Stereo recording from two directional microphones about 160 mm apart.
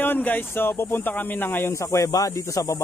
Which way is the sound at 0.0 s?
10° left (ahead or behind).